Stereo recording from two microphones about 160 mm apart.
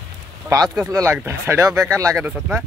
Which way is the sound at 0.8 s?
20° right (ahead or behind).